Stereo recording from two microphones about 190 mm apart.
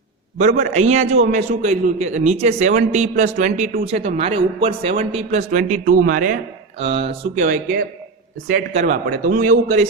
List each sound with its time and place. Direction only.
0.3 s a man's voice: 40° right (ahead or behind)
6.7 s a man's voice: 30° right (ahead or behind)
8.4 s a man's voice: 45° right (ahead or behind)